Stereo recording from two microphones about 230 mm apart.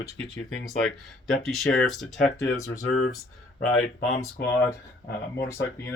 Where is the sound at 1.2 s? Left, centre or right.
Centre.